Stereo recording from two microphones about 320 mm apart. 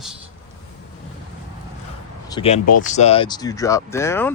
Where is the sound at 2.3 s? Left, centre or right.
Centre.